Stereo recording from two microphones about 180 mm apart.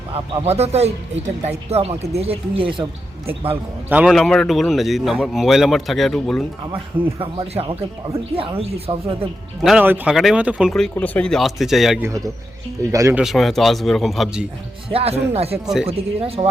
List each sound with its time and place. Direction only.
0.1 s speech: 35° right (ahead or behind)
3.8 s a man's voice: 5° right (ahead or behind)
7.2 s speech: 30° right (ahead or behind)
9.6 s a man's voice: 10° right (ahead or behind)
12.9 s speech: 15° right (ahead or behind)
13.2 s a man's voice: centre (ahead or behind)
14.8 s speech: 35° right (ahead or behind)
15.6 s a man's voice: 5° right (ahead or behind)
15.9 s speech: 35° right (ahead or behind)